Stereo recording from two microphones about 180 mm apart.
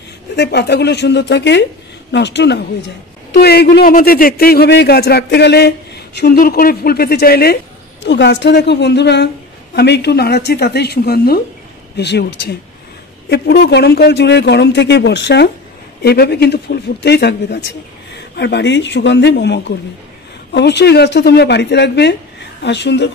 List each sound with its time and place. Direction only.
0.4 s speech: 65° left (ahead or behind)
3.3 s a man's voice: 60° left (ahead or behind)
8.0 s a man's voice: 75° left (ahead or behind)